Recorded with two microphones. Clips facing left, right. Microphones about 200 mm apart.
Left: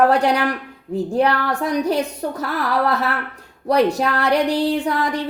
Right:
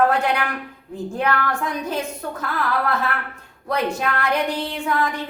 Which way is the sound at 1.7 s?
35° left (ahead or behind).